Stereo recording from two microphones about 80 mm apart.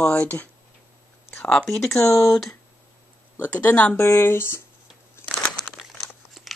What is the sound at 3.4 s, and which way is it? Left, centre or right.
Speech, left.